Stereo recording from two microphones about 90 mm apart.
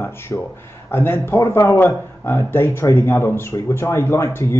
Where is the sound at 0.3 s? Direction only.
20° left (ahead or behind).